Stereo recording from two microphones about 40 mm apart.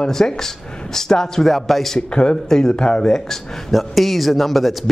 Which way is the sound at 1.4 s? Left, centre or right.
Centre.